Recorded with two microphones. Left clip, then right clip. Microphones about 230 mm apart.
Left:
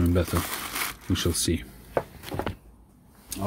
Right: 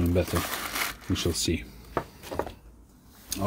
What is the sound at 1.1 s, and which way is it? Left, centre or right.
Speech, centre.